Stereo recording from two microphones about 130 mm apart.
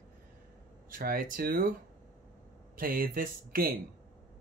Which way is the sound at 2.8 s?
90° right.